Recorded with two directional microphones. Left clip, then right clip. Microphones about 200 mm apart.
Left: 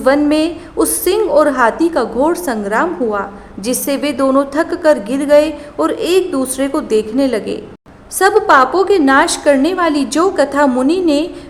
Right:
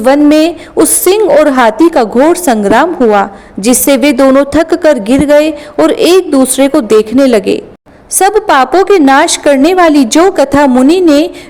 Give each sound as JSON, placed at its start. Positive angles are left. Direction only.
{"t": 0.0, "sound": "a woman's voice", "side_deg": -35}